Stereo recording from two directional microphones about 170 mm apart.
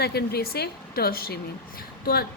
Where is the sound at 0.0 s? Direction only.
70° left (ahead or behind).